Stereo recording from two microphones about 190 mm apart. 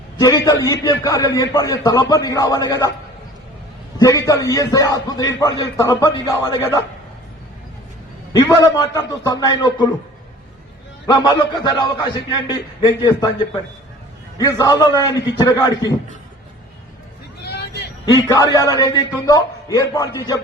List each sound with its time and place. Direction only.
0.2 s a man's voice: 15° left (ahead or behind)
3.9 s a man's voice: 15° left (ahead or behind)
8.3 s a man's voice: 20° left (ahead or behind)
11.0 s a man's voice: 20° left (ahead or behind)
14.3 s a man's voice: 20° left (ahead or behind)
17.4 s vehicle: 60° left (ahead or behind)
18.0 s a man's voice: 20° left (ahead or behind)